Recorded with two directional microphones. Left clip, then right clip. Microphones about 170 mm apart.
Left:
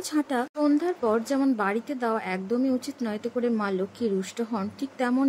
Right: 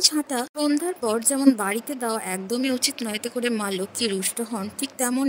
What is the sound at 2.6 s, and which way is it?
Speech, 70° right (ahead or behind).